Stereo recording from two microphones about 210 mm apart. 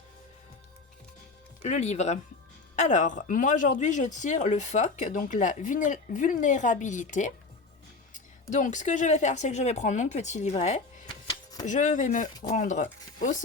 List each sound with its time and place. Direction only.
1.6 s a woman's voice: 35° left (ahead or behind)